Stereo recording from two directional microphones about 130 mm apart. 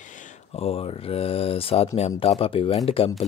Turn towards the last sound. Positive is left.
turn(degrees=45)  # may be behind; listen again after turning